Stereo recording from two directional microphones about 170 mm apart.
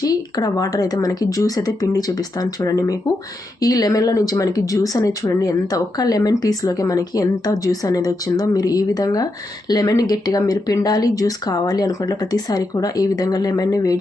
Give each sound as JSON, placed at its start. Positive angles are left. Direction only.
{"t": 0.0, "sound": "speech", "side_deg": 20}